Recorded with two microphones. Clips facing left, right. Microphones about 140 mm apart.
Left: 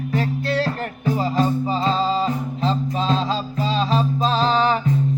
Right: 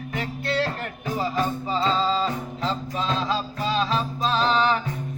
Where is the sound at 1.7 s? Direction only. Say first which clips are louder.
Left 2 dB; 30° left (ahead or behind).